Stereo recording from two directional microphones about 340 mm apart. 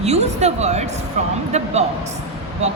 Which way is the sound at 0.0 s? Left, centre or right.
Centre.